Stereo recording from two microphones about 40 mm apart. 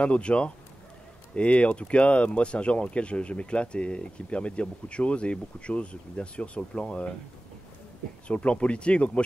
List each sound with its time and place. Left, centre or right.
0.0 s speech: left
8.3 s speech: left